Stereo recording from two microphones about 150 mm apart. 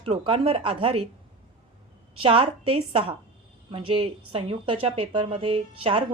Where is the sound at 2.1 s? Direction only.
40° right (ahead or behind).